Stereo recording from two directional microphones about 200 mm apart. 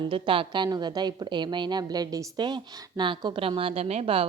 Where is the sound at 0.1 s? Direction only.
25° right (ahead or behind).